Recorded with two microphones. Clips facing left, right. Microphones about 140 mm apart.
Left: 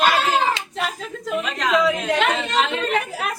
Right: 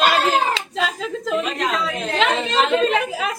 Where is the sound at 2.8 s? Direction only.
90° right.